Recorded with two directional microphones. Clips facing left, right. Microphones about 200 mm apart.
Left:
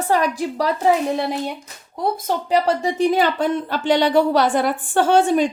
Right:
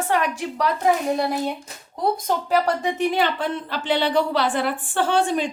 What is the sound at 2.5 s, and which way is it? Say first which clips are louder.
Speech: left 3 dB; 25° left (ahead or behind).